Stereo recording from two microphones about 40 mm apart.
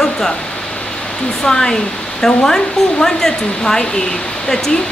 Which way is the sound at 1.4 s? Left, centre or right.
Centre.